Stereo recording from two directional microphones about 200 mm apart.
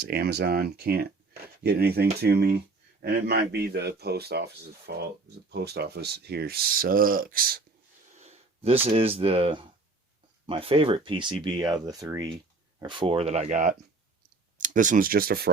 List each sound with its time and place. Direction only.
0.0 s speech: 50° right (ahead or behind)
8.1 s a sound: 35° right (ahead or behind)
8.9 s speech: 30° right (ahead or behind); by 15.5 s 50° right (ahead or behind)